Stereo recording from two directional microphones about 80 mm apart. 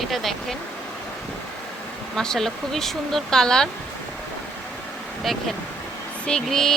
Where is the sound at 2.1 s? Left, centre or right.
Centre.